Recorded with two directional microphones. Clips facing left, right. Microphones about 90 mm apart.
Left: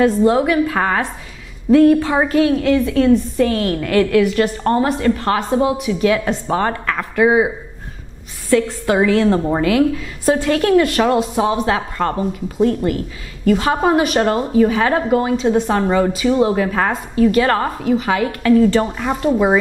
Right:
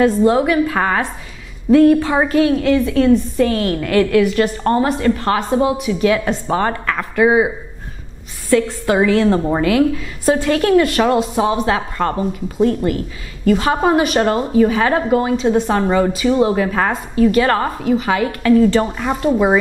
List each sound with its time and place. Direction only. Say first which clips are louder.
0.3 s a woman's voice: even; 20° right (ahead or behind)
9.7 s a woman's voice: even; 20° right (ahead or behind)